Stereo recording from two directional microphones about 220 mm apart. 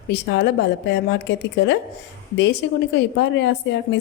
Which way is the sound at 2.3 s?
55° left (ahead or behind).